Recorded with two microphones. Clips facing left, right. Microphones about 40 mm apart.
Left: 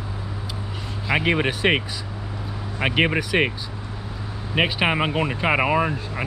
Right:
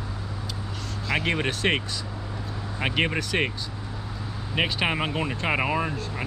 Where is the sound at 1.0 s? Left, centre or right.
Centre.